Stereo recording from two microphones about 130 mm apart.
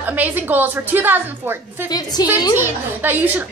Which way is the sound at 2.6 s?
15° right (ahead or behind).